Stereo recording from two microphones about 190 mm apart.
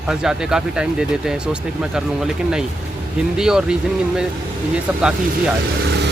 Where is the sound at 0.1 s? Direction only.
5° right (ahead or behind).